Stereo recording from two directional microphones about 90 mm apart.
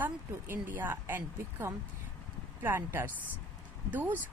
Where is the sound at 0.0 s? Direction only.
25° right (ahead or behind).